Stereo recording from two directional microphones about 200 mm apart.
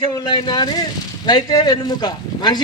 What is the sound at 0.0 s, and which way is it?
Speech, 20° left (ahead or behind).